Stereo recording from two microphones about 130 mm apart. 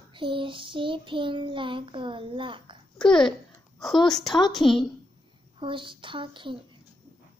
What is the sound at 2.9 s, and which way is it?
A child's voice, 5° left (ahead or behind).